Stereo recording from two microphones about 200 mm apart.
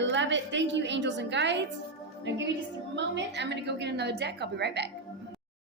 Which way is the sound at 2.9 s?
65° right (ahead or behind).